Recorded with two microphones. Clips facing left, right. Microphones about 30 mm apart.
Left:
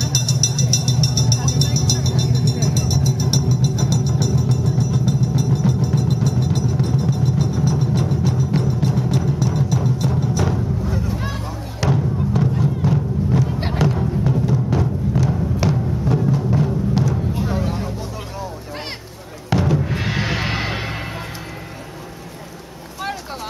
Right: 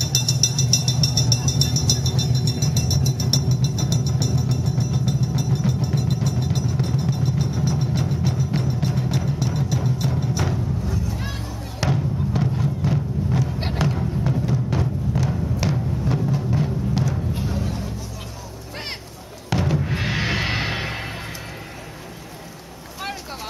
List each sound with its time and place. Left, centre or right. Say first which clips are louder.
0.0 s vehicle: left 2 dB; centre
8.2 s music: left 4 dB; centre
10.2 s timpani: left 4 dB; centre
11.8 s music: left 3 dB; centre
17.5 s a sound: left 5 dB; left
19.5 s music: left 4 dB; centre